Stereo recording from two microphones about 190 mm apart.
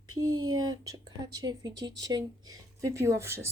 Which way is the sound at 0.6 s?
20° right (ahead or behind).